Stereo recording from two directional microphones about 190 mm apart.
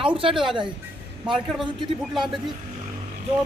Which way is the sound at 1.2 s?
Centre (ahead or behind).